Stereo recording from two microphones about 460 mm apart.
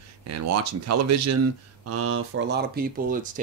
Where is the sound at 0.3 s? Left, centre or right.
Right.